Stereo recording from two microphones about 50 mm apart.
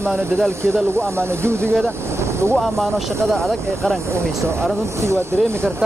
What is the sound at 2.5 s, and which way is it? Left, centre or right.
Speech, centre.